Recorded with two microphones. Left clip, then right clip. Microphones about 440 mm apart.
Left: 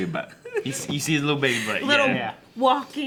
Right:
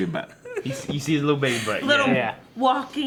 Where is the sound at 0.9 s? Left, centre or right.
Right.